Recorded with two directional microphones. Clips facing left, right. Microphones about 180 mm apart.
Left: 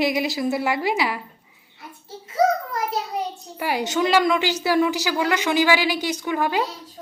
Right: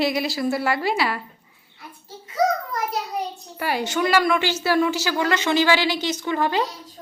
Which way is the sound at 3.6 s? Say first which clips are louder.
Left 1 dB; 15° left (ahead or behind).